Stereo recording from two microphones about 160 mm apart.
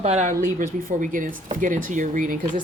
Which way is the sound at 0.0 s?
45° right (ahead or behind).